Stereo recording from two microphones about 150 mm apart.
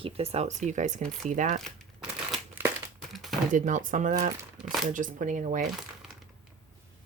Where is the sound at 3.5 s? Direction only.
55° right (ahead or behind).